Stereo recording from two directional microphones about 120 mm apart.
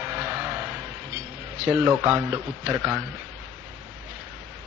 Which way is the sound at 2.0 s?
15° right (ahead or behind).